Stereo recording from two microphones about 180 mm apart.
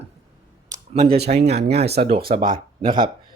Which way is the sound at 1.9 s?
60° right (ahead or behind).